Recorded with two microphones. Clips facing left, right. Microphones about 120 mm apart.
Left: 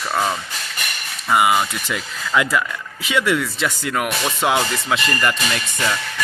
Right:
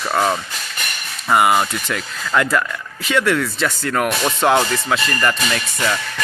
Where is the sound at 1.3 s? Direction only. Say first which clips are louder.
Right 2 dB; centre (ahead or behind).